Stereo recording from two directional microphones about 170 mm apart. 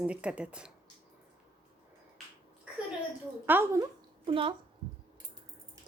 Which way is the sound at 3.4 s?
15° right (ahead or behind).